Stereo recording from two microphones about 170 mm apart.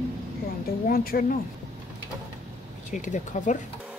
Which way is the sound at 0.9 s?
60° left (ahead or behind).